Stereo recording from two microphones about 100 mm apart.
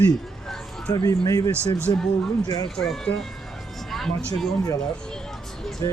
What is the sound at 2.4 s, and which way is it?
Speech, 45° left (ahead or behind).